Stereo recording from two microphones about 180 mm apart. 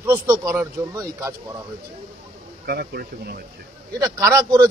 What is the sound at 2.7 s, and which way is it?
Speech, 60° right (ahead or behind).